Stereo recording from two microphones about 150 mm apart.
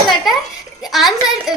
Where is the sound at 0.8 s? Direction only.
Centre (ahead or behind).